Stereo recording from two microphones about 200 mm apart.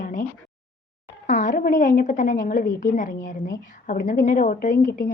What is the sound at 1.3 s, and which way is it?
A woman's voice, 40° left (ahead or behind).